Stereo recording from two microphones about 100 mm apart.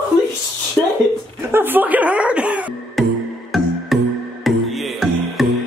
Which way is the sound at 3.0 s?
Centre (ahead or behind).